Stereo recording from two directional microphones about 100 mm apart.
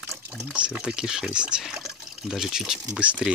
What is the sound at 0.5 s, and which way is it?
Speech, 10° right (ahead or behind).